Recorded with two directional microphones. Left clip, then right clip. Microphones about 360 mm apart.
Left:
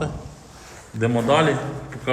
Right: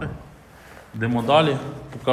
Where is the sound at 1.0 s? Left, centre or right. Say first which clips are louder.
Even; centre.